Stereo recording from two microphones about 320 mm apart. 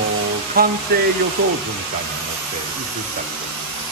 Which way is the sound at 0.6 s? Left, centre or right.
Right.